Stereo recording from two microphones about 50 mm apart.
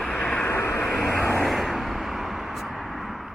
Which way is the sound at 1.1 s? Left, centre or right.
Left.